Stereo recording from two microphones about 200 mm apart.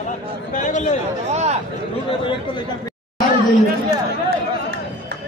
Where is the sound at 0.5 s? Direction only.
35° left (ahead or behind).